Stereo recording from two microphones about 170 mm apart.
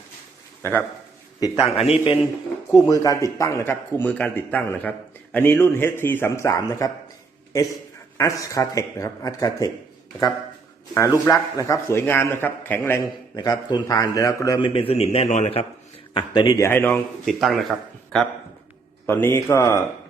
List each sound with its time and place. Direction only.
0.6 s speech: 15° left (ahead or behind)
1.4 s a man's voice: 30° left (ahead or behind)
2.9 s a man's voice: 20° left (ahead or behind)
8.2 s speech: 20° left (ahead or behind)
10.9 s a man's voice: 20° left (ahead or behind)
13.3 s speech: 25° left (ahead or behind)
14.7 s a man's voice: 35° left (ahead or behind)
16.1 s a man's voice: 25° left (ahead or behind); by 18.3 s centre (ahead or behind)
19.0 s a man's voice: 15° left (ahead or behind)